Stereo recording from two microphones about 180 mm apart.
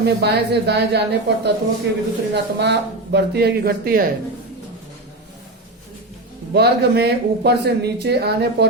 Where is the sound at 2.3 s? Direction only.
70° right (ahead or behind).